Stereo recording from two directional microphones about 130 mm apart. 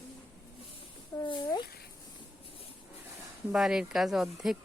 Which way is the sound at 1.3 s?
35° left (ahead or behind).